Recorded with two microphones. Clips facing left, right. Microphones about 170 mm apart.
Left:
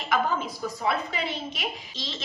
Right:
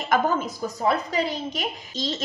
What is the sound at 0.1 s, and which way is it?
A woman's voice, 45° right (ahead or behind).